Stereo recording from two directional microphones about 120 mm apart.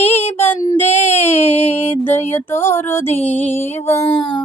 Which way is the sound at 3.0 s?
60° left (ahead or behind).